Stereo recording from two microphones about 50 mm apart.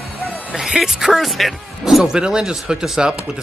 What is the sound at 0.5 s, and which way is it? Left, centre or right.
Speech, centre.